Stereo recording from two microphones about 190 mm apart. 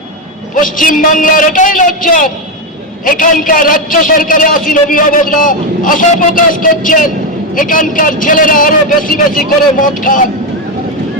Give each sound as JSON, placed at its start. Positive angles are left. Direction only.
{"t": 0.5, "sound": "a man's voice", "side_deg": 45}